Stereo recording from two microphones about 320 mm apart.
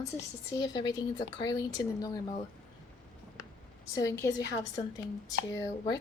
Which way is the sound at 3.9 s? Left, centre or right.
Centre.